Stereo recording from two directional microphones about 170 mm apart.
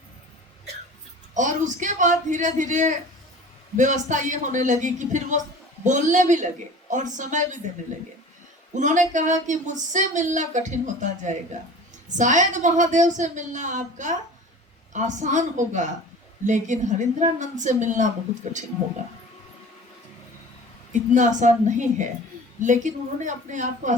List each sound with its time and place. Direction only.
1.3 s speech: 45° right (ahead or behind)
8.7 s speech: 45° right (ahead or behind)
20.9 s speech: 45° right (ahead or behind)